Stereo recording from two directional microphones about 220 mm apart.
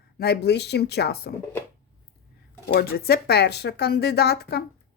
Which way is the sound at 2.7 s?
45° left (ahead or behind).